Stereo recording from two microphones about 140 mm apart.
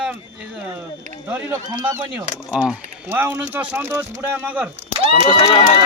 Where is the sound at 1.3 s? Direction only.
15° right (ahead or behind).